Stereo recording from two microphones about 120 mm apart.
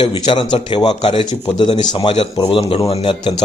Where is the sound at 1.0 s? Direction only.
55° left (ahead or behind).